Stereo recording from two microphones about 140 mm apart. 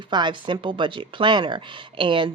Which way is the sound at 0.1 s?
30° right (ahead or behind).